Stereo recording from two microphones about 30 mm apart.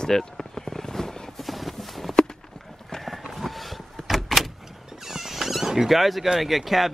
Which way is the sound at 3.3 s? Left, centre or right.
Centre.